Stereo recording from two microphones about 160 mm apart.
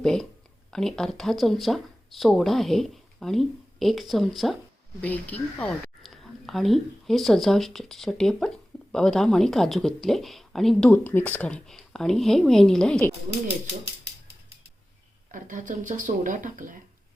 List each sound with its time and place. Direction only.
0.0 s speech: 5° left (ahead or behind)
15.3 s speech: 55° right (ahead or behind)